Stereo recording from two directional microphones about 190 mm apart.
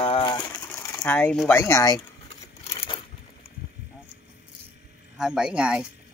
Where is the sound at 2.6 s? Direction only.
30° left (ahead or behind).